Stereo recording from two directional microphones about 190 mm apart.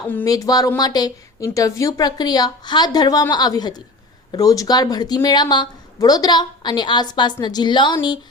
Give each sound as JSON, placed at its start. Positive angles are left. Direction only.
{"t": 0.1, "sound": "a woman's voice", "side_deg": 15}